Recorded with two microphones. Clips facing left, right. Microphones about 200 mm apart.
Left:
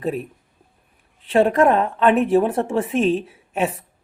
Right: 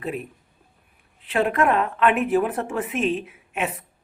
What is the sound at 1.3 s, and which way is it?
Speech, 30° left (ahead or behind).